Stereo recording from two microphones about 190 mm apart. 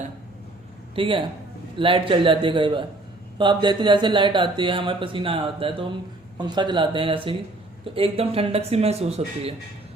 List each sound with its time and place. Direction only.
0.9 s speech: 25° right (ahead or behind)